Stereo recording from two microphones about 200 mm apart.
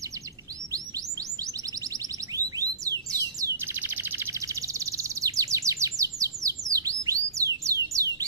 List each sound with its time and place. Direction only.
2.3 s bird: 15° right (ahead or behind)